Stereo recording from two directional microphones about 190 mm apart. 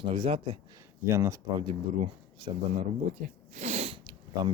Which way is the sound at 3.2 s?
45° right (ahead or behind).